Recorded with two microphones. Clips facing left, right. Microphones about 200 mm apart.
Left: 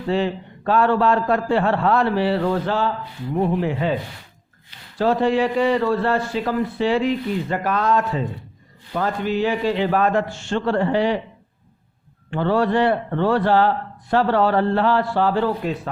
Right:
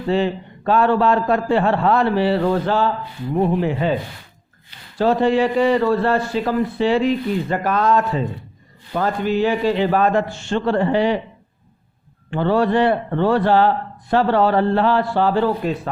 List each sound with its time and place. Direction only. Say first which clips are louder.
0.1 s a man's voice: right 2 dB; 20° right (ahead or behind); by 2.9 s 40° right (ahead or behind)
3.3 s a man's voice: right 2 dB; 30° right (ahead or behind)
4.9 s a man's voice: right 2 dB; 25° right (ahead or behind)
12.3 s a man's voice: right 2 dB; 20° right (ahead or behind); by 15.9 s 35° right (ahead or behind)